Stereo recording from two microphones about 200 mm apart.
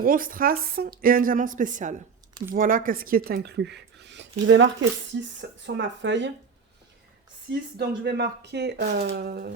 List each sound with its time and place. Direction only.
0.0 s speech: 45° right (ahead or behind); by 6.3 s 65° right (ahead or behind)
7.8 s speech: 55° right (ahead or behind)